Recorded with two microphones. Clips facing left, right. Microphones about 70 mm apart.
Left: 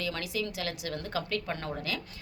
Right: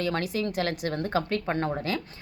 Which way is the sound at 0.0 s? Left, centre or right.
Right.